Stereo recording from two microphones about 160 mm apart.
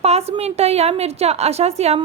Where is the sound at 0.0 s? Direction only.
40° right (ahead or behind).